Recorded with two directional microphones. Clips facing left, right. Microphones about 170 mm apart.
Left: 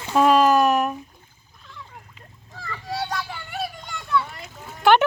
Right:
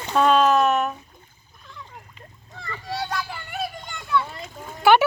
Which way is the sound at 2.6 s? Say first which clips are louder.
Left 1 dB; centre (ahead or behind).